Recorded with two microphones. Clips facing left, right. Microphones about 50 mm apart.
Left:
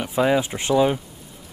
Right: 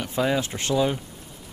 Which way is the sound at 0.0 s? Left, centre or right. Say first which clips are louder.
Left 4 dB; centre.